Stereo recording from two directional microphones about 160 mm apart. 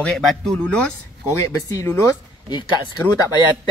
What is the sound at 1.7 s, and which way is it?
Speech, 20° left (ahead or behind).